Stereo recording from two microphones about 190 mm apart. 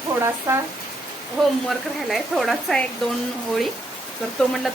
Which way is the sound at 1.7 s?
Centre (ahead or behind).